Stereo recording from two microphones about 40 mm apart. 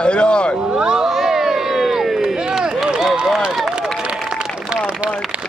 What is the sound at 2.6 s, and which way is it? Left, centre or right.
Run, centre.